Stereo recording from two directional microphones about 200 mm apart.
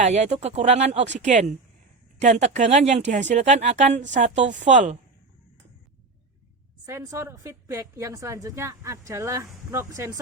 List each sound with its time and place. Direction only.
0.0 s speech: 35° right (ahead or behind)
6.8 s a woman's voice: 15° right (ahead or behind)